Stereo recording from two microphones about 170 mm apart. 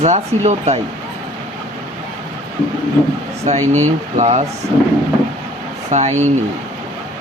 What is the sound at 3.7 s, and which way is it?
Speech, 45° right (ahead or behind).